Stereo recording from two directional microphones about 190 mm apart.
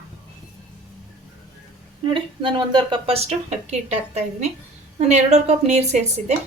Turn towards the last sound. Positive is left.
turn(degrees=-35)  # may be behind; listen again after turning